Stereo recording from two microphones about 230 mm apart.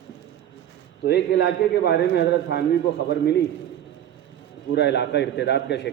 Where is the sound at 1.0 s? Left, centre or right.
Left.